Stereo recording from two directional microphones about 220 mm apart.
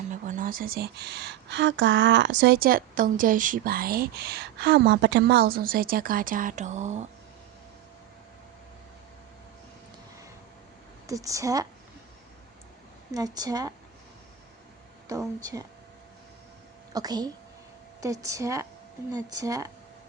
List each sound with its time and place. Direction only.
0.1 s a woman's voice: 35° right (ahead or behind)
11.0 s a woman's voice: 15° right (ahead or behind)
13.1 s a woman's voice: 15° right (ahead or behind)
15.1 s a woman's voice: 15° right (ahead or behind)
16.9 s a woman's voice: 15° right (ahead or behind)